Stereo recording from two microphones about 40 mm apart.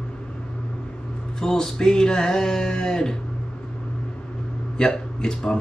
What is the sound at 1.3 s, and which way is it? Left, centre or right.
Music, centre.